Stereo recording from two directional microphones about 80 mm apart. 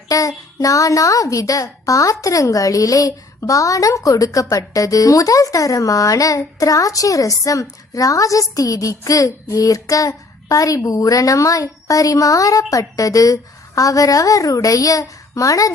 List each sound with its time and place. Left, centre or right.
0.1 s a woman's voice: left